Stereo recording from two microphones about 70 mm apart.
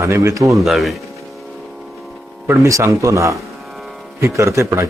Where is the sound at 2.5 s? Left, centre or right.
Right.